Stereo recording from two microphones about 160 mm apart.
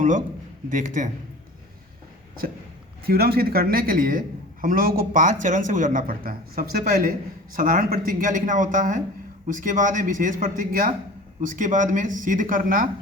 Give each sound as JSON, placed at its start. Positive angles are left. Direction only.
{"t": 0.7, "sound": "a man's voice", "side_deg": -55}
{"t": 3.1, "sound": "a man's voice", "side_deg": -75}